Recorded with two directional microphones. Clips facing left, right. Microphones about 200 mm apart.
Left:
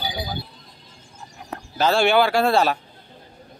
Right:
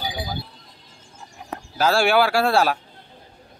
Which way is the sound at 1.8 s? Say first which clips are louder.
Even; 5° right (ahead or behind).